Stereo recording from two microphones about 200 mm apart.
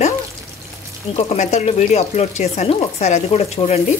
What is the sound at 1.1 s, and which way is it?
Speech, 35° left (ahead or behind).